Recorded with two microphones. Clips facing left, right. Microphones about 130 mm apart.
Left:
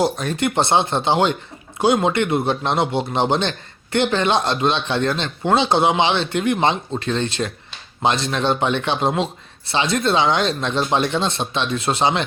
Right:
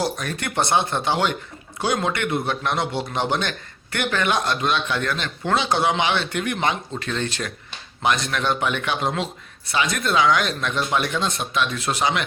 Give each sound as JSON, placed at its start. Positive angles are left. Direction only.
{"t": 0.0, "sound": "speech", "side_deg": 20}